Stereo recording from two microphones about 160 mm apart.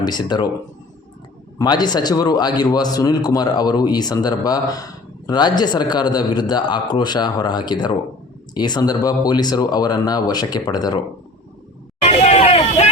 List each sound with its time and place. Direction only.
0.0 s speech: 25° left (ahead or behind)
1.5 s speech: 25° left (ahead or behind)
12.0 s hubbub: 40° left (ahead or behind)